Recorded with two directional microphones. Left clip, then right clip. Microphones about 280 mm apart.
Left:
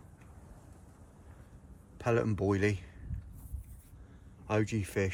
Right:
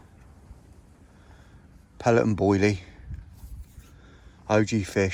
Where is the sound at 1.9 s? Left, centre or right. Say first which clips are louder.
Right 9 dB; centre.